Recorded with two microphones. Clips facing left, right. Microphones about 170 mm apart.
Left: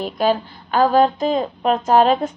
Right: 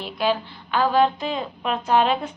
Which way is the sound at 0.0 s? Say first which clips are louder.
Left 5 dB; 45° left (ahead or behind).